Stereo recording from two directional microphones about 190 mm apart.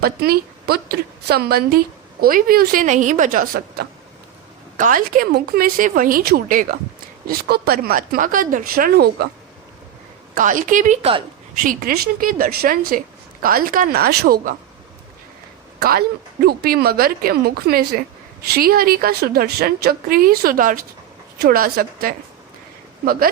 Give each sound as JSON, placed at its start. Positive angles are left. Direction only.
{"t": 0.0, "sound": "a woman's voice", "side_deg": -55}
{"t": 10.3, "sound": "a woman's voice", "side_deg": -45}
{"t": 15.8, "sound": "a woman's voice", "side_deg": -50}